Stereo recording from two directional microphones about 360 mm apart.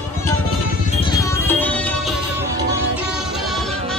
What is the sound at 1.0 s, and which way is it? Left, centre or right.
Music, centre.